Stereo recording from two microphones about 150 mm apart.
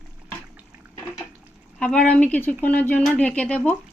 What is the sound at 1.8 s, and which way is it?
Speech, 10° left (ahead or behind).